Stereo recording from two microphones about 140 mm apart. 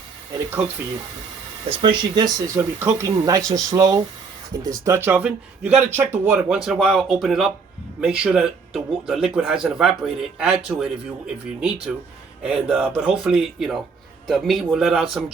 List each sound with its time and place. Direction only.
1.8 s speech: 35° right (ahead or behind)
2.6 s speech: 20° right (ahead or behind)